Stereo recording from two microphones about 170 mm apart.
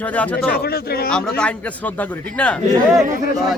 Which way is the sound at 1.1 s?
5° left (ahead or behind).